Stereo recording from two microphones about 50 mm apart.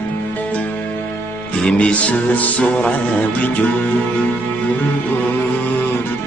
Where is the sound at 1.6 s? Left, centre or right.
Left.